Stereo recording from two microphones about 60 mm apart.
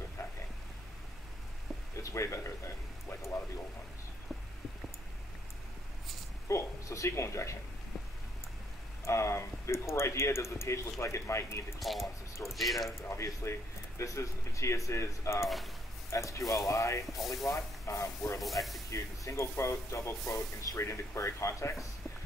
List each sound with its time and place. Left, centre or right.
0.2 s a sound: left
2.0 s a sound: left
6.4 s speech: left
9.0 s speech: left
12.5 s speech: centre
13.1 s speech: left
15.4 s speech: centre
16.1 s speech: left
17.0 s speech: centre
17.5 s speech: left
18.4 s speech: centre
18.9 s speech: left
20.8 s speech: left